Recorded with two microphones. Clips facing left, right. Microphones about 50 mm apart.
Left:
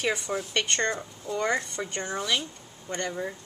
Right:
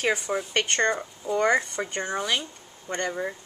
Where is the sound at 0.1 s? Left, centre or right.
Centre.